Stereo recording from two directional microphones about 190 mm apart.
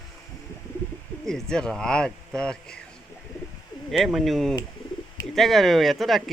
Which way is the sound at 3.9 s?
Centre (ahead or behind).